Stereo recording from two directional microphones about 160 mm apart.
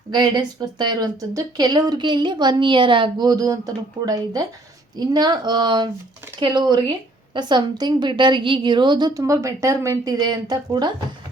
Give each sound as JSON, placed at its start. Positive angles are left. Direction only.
{"t": 0.1, "sound": "a woman's voice", "side_deg": -25}